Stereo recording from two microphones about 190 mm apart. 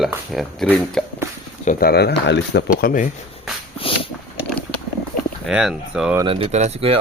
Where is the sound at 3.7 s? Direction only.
30° left (ahead or behind).